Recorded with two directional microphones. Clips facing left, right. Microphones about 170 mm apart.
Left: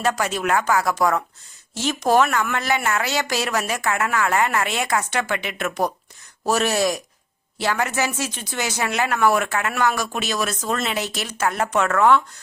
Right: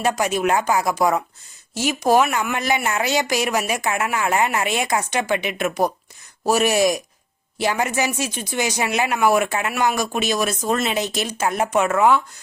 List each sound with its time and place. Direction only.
0.0 s speech: 15° right (ahead or behind)